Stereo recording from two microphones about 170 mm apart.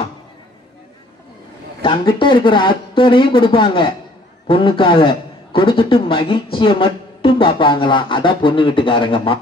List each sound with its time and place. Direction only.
1.8 s a man's voice: 30° left (ahead or behind)